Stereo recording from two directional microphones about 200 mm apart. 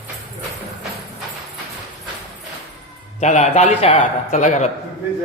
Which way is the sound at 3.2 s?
35° left (ahead or behind).